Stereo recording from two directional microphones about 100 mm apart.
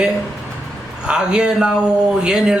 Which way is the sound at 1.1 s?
10° right (ahead or behind).